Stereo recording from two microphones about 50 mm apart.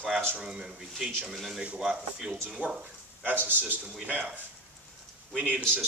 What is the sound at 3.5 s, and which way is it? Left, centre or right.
Speech, right.